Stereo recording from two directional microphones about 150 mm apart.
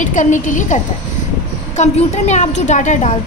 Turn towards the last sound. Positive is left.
turn(degrees=55)  # may be behind; listen again after turning